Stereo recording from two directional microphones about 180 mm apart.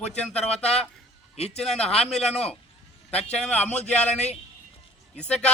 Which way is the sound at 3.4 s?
10° left (ahead or behind).